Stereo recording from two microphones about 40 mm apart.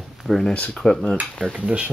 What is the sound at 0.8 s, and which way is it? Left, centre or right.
Speech, centre.